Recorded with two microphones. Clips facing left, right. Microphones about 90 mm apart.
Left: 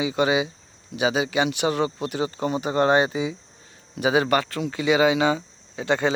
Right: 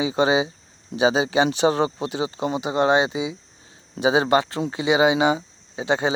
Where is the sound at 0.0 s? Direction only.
30° right (ahead or behind).